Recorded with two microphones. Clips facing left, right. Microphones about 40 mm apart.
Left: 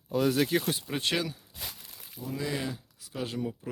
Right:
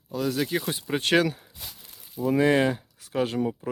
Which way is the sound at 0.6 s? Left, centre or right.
Right.